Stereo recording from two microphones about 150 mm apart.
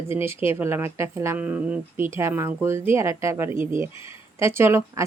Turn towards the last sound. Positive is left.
turn(degrees=-20)  # may be behind; listen again after turning